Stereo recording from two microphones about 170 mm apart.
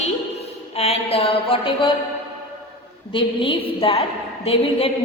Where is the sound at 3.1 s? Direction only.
30° left (ahead or behind).